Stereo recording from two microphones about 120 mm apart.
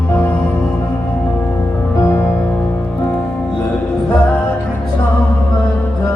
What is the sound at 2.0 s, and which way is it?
Music, 25° left (ahead or behind).